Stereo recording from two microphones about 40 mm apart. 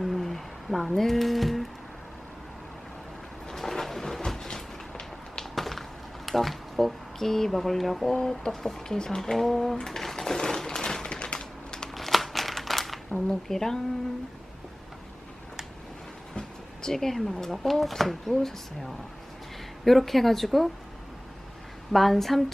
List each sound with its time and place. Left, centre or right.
0.0 s a sound: centre
0.9 s speech: centre
3.5 s a sound: centre
5.5 s a sound: centre
6.2 s speech: centre
9.5 s speech: centre
9.7 s a sound: centre
11.3 s typing: centre
11.9 s crumpling: centre
13.2 s speech: centre
16.3 s speech: centre
21.9 s speech: centre